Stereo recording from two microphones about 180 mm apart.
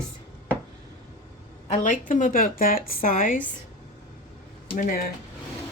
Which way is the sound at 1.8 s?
45° left (ahead or behind).